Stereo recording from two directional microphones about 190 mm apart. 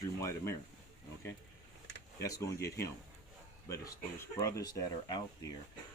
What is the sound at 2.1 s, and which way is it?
Speech, 15° left (ahead or behind).